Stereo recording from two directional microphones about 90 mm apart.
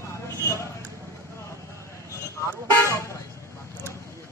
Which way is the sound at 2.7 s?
30° left (ahead or behind).